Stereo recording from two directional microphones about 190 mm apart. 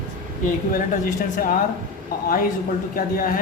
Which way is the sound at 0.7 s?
45° left (ahead or behind).